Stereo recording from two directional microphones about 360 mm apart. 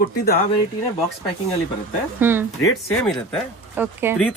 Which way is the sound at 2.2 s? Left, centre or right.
Centre.